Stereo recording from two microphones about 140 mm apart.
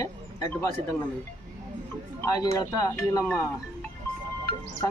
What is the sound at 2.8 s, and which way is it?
Speech, 20° left (ahead or behind).